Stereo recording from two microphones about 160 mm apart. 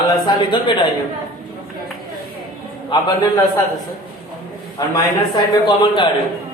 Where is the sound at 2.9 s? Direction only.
30° left (ahead or behind).